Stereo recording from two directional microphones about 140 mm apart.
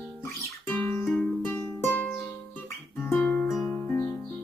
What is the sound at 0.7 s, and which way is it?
Music, 15° left (ahead or behind).